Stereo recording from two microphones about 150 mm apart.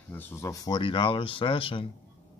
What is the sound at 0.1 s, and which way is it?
Speech, 15° left (ahead or behind).